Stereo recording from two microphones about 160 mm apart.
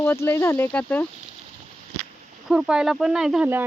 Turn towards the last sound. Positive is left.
turn(degrees=-5)  # may be behind; listen again after turning